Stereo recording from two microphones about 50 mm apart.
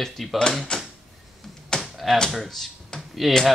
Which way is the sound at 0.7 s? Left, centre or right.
Centre.